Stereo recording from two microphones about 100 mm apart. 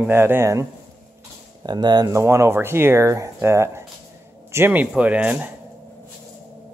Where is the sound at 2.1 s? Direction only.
30° right (ahead or behind).